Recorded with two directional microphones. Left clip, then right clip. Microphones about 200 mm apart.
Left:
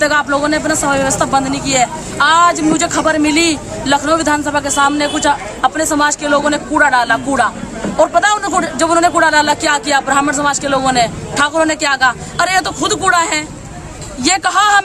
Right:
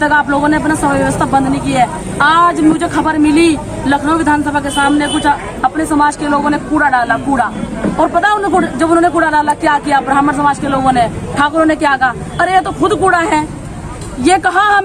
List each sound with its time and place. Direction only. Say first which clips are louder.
0.0 s a woman's voice: right 2 dB; 20° left (ahead or behind)